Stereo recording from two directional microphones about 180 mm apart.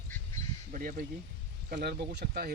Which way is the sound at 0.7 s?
50° right (ahead or behind).